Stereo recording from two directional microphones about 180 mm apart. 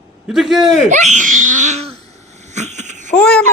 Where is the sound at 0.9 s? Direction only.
40° right (ahead or behind).